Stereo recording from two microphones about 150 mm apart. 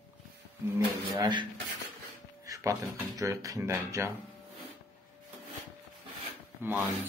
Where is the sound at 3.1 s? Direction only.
20° right (ahead or behind).